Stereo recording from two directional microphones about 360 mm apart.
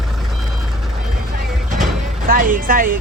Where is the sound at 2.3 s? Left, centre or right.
Right.